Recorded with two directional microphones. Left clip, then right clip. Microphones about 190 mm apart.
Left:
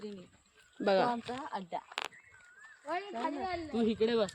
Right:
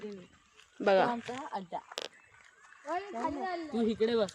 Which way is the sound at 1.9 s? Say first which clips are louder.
Left 3 dB; 40° right (ahead or behind).